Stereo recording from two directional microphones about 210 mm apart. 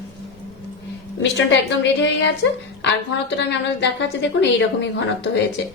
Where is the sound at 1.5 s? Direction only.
55° left (ahead or behind).